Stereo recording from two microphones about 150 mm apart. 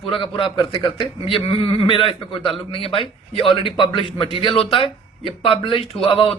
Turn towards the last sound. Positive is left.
turn(degrees=40)  # may be behind; listen again after turning